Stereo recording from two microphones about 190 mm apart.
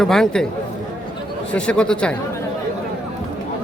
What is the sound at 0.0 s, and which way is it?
Speech, 5° left (ahead or behind).